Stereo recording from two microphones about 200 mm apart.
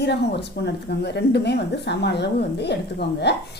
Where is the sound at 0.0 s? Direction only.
55° left (ahead or behind).